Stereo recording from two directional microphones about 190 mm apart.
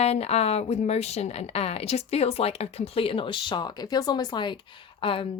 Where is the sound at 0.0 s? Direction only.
30° left (ahead or behind).